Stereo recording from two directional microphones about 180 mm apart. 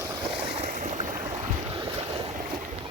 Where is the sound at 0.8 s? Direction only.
45° right (ahead or behind).